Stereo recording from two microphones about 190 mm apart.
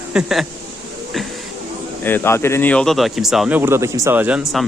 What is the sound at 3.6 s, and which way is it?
Speech, 15° right (ahead or behind).